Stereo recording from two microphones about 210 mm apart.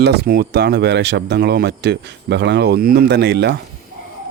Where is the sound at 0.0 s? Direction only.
50° right (ahead or behind).